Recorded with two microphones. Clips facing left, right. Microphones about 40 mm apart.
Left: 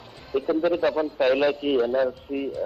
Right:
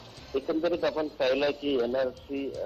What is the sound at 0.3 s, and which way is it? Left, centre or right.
Speech, centre.